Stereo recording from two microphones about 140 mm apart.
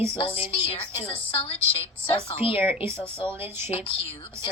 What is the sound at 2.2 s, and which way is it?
Speech, 40° left (ahead or behind).